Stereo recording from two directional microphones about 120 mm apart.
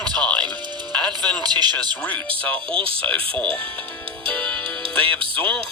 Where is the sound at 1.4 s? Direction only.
35° right (ahead or behind).